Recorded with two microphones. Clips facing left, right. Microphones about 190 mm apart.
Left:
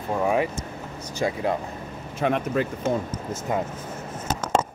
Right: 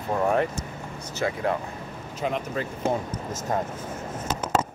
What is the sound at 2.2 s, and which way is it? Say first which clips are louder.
Speech: left 5 dB; 60° left (ahead or behind).